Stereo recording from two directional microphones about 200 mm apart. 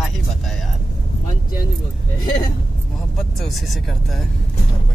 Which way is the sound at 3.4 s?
Centre (ahead or behind).